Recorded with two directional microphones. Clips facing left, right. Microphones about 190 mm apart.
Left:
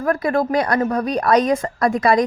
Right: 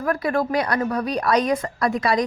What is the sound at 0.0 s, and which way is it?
A woman's voice, 45° left (ahead or behind).